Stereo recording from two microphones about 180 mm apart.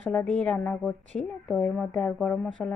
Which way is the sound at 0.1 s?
5° left (ahead or behind).